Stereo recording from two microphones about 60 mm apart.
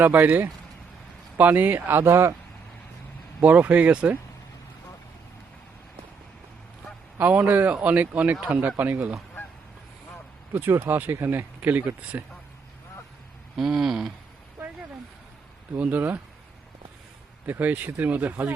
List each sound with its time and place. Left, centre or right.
0.0 s speech: right
3.4 s speech: right
7.2 s speech: right
10.5 s speech: right
13.6 s a sound: centre
15.8 s speech: right
17.4 s speech: right